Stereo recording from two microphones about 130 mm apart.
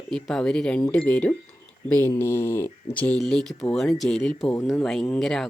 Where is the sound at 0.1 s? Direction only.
5° left (ahead or behind).